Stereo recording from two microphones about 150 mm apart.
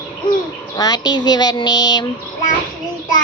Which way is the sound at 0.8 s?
25° left (ahead or behind).